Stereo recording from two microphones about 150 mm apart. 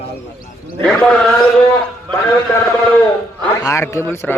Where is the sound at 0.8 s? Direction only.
10° left (ahead or behind).